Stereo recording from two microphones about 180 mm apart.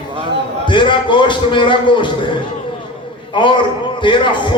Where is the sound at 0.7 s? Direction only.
25° left (ahead or behind).